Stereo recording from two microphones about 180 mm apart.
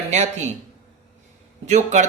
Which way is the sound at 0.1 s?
40° right (ahead or behind).